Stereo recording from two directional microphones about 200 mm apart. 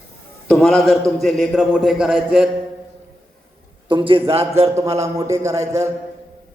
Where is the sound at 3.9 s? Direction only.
25° right (ahead or behind).